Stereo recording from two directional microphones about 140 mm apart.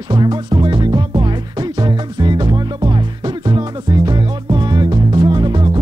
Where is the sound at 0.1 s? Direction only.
30° right (ahead or behind).